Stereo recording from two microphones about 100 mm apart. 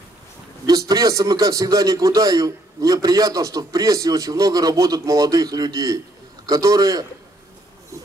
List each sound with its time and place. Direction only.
0.7 s a man's voice: 40° right (ahead or behind)